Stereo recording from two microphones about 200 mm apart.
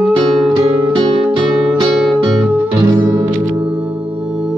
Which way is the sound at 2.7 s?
25° right (ahead or behind).